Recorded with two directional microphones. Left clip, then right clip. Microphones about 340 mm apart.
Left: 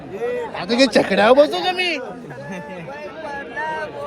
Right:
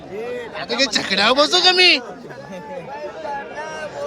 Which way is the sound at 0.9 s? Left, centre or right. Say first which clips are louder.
Left 3 dB; centre.